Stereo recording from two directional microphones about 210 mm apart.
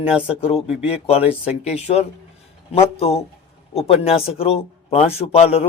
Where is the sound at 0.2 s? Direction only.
30° left (ahead or behind).